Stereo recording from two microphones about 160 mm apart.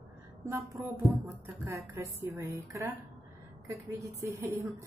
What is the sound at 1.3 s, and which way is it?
A woman's voice, 15° right (ahead or behind).